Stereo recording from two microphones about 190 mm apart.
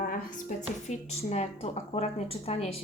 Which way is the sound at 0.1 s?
40° left (ahead or behind).